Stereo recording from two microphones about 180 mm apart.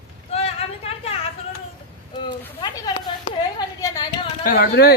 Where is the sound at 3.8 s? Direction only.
20° left (ahead or behind).